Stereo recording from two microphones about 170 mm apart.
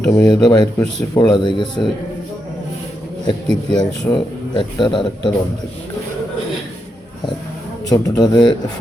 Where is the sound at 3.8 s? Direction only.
30° left (ahead or behind).